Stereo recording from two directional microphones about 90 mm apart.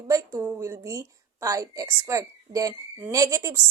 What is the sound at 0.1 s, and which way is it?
A woman's voice, 35° right (ahead or behind).